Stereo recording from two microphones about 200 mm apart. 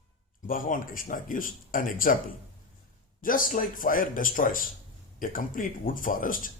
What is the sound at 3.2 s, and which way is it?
A man's voice, 45° left (ahead or behind).